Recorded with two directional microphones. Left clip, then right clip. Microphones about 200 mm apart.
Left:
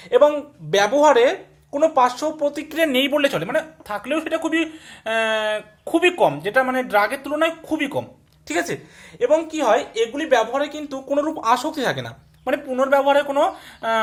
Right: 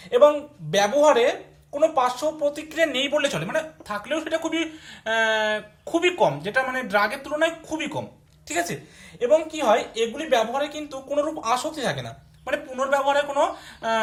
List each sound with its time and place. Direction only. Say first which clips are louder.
0.1 s a woman's voice: left 1 dB; 50° left (ahead or behind)